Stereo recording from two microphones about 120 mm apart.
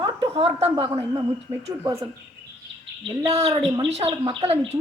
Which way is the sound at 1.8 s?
25° right (ahead or behind).